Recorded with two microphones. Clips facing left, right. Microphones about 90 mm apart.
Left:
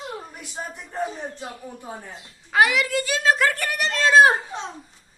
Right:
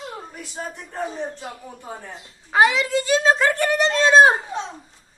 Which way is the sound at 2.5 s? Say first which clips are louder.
Right 2 dB; 25° right (ahead or behind).